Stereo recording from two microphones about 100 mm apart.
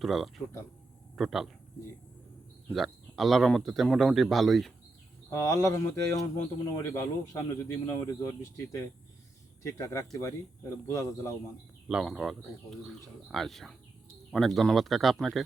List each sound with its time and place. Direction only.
0.0 s a man's voice: centre (ahead or behind)
2.7 s speech: centre (ahead or behind)
5.3 s speech: 35° left (ahead or behind)
11.9 s speech: 5° right (ahead or behind)